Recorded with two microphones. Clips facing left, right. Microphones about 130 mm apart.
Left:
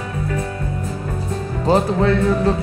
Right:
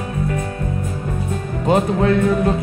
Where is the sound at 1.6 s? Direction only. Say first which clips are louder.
Even; 30° left (ahead or behind).